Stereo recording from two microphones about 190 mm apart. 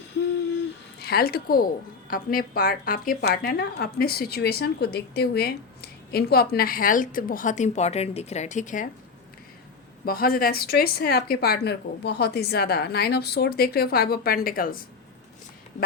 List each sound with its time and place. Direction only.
0.9 s a woman's voice: 55° left (ahead or behind)
10.1 s speech: 50° left (ahead or behind)